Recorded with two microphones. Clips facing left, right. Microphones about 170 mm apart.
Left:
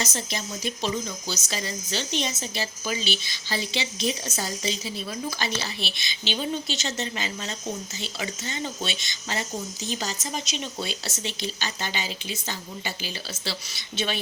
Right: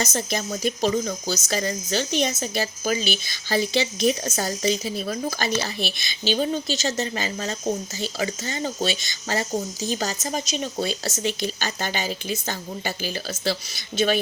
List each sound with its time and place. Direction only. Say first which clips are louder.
0.0 s speech: right 5 dB; 45° right (ahead or behind)